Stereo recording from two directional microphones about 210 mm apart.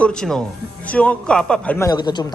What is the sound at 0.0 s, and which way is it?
A man's voice, 5° left (ahead or behind).